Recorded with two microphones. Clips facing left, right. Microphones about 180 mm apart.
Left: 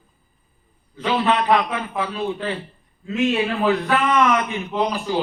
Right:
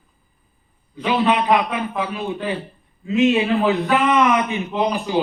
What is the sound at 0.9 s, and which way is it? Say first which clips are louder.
A man's voice: right 2 dB; 15° right (ahead or behind).